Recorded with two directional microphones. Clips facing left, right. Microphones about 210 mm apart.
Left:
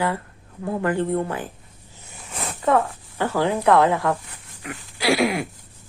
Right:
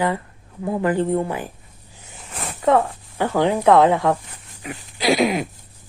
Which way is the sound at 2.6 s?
15° right (ahead or behind).